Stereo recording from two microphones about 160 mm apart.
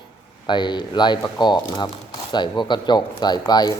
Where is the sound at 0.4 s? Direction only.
30° left (ahead or behind).